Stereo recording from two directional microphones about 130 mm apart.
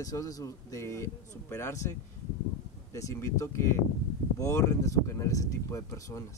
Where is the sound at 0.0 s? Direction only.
30° left (ahead or behind).